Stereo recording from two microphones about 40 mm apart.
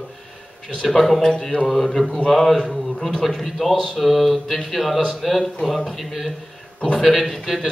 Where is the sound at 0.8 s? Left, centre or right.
Centre.